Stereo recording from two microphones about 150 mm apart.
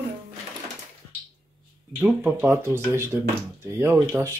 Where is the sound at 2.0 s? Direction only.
10° right (ahead or behind).